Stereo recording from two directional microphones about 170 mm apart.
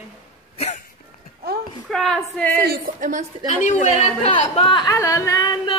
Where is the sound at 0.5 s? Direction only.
40° left (ahead or behind).